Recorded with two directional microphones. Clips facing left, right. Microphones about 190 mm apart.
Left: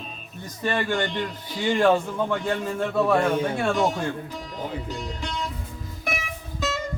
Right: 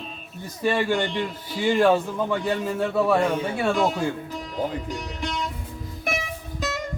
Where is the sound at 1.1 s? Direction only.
5° right (ahead or behind).